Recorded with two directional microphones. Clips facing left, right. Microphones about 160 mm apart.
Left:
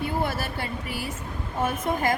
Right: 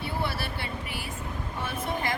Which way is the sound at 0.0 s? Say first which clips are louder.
Left 4 dB; 45° left (ahead or behind).